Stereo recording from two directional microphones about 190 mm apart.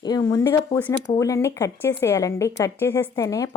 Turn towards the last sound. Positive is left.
turn(degrees=15)  # may be behind; listen again after turning